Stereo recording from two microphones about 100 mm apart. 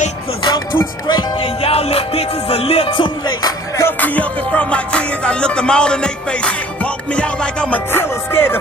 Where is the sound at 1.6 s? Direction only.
85° left; by 3.1 s 65° left (ahead or behind).